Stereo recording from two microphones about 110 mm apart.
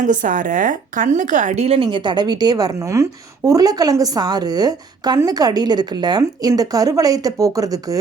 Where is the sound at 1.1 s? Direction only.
90° right.